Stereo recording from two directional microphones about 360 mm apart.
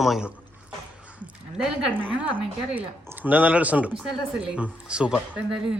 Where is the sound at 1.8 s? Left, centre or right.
Centre.